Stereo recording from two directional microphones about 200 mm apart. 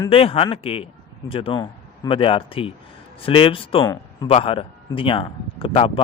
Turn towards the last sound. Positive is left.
turn(degrees=25)  # may be behind; listen again after turning